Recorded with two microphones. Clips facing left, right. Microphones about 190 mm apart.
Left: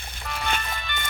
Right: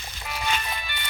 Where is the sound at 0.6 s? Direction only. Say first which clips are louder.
Even; 5° right (ahead or behind).